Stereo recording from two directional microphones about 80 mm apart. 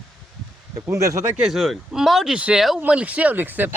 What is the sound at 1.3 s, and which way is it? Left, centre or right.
Speech, centre.